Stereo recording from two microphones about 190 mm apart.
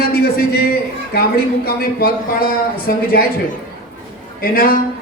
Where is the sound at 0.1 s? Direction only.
55° left (ahead or behind).